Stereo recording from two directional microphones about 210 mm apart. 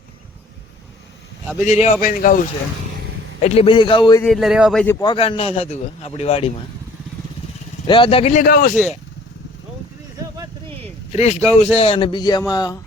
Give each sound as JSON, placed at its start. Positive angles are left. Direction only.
{"t": 1.6, "sound": "speech", "side_deg": 35}
{"t": 3.4, "sound": "speech", "side_deg": 30}
{"t": 4.2, "sound": "a man's voice", "side_deg": 0}
{"t": 4.9, "sound": "speech", "side_deg": 20}
{"t": 7.9, "sound": "speech", "side_deg": 25}
{"t": 8.7, "sound": "speech", "side_deg": 5}
{"t": 10.2, "sound": "a sound", "side_deg": -15}
{"t": 11.1, "sound": "speech", "side_deg": 30}